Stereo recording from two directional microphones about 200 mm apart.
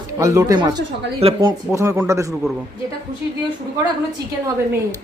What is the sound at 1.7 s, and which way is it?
Speech, 15° right (ahead or behind).